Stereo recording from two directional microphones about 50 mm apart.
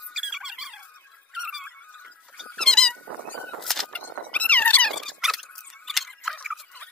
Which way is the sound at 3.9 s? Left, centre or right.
Left.